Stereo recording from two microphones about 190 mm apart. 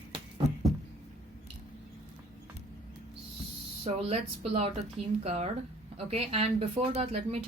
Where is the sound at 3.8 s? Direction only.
35° right (ahead or behind).